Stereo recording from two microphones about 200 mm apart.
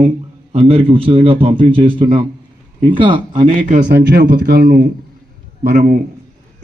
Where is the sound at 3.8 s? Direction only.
55° right (ahead or behind).